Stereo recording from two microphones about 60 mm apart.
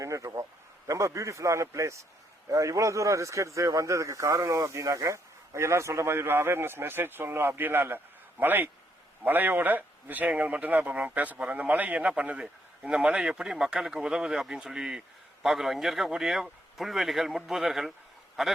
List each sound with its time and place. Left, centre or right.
0.0 s a man's voice: right; by 18.5 s centre